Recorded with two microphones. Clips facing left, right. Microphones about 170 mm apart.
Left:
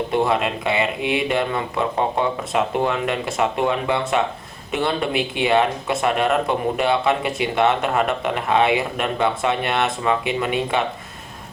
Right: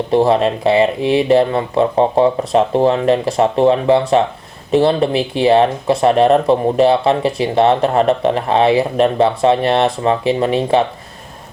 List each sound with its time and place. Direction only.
0.1 s speech: 35° right (ahead or behind)